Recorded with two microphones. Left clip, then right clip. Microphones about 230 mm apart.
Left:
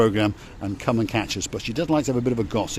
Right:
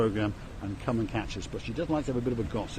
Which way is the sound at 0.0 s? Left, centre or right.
Left.